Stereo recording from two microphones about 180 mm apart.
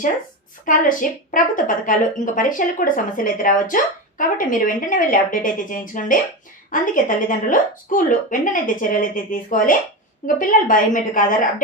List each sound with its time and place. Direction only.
0.6 s a woman's voice: 50° left (ahead or behind)